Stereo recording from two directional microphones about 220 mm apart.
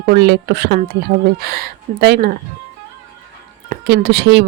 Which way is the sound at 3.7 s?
50° right (ahead or behind).